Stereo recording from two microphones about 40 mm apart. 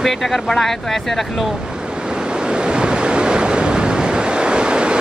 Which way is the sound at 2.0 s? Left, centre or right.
Right.